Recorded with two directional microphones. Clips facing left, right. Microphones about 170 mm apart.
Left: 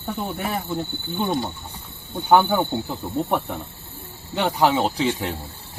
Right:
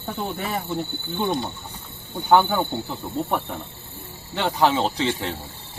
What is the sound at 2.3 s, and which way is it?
Cricket, 15° left (ahead or behind).